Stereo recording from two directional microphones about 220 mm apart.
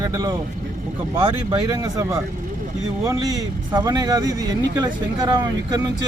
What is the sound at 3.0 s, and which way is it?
Speech, 15° right (ahead or behind).